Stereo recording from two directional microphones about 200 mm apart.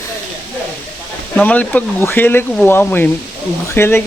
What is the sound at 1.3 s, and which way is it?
Speech, 5° left (ahead or behind).